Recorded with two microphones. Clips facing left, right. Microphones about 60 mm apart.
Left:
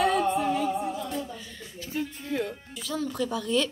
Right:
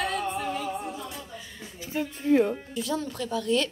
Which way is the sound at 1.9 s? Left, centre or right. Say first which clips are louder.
Right 8 dB; right.